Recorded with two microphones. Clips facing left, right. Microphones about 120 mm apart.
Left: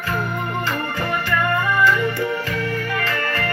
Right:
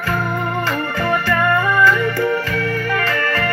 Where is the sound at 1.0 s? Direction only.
40° right (ahead or behind).